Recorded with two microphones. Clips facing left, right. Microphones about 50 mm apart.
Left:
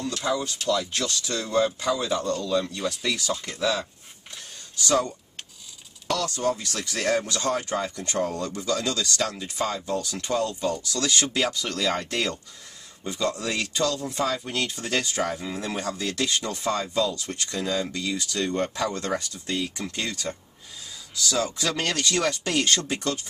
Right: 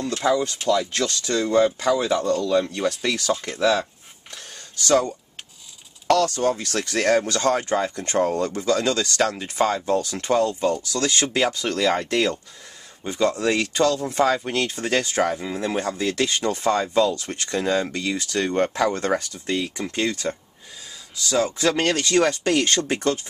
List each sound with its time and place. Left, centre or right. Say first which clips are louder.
0.0 s speech: right 6 dB; right
6.0 s speech: right 6 dB; right
15.3 s speech: right 5 dB; centre; by 23.2 s right